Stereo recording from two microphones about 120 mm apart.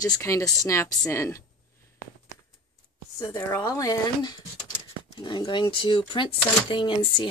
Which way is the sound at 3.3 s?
30° left (ahead or behind).